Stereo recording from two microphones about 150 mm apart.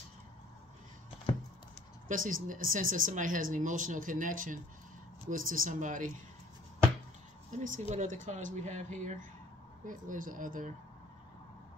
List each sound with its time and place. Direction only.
2.0 s speech: 65° right (ahead or behind)
7.5 s speech: 60° right (ahead or behind)
9.8 s speech: 65° right (ahead or behind)